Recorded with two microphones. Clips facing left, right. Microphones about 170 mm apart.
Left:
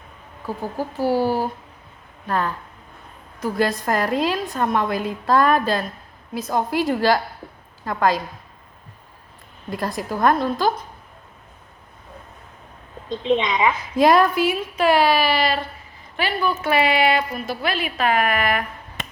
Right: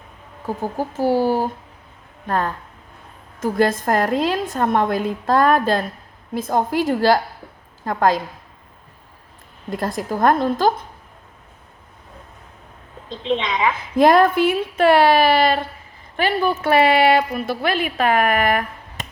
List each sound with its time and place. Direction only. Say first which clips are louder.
0.4 s a woman's voice: right 3 dB; 45° right (ahead or behind)
2.2 s a woman's voice: right 1 dB; 45° right (ahead or behind)
9.6 s a woman's voice: right 2 dB; 45° right (ahead or behind)
13.2 s a woman's voice: left 1 dB; 20° left (ahead or behind)
13.9 s a woman's voice: right 3 dB; 50° right (ahead or behind)